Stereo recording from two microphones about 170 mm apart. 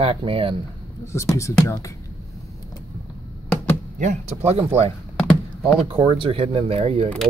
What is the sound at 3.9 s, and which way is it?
Speech, 45° right (ahead or behind).